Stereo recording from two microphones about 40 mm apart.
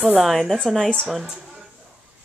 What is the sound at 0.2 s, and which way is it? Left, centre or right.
A woman's voice, centre.